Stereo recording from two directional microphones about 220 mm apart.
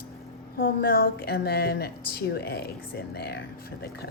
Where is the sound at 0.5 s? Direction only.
40° left (ahead or behind).